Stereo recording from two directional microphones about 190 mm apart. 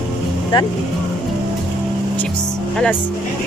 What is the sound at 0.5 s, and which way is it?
Speech, 25° left (ahead or behind).